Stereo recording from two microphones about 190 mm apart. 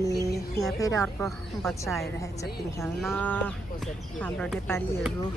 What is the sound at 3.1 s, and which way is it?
Speech, 5° left (ahead or behind).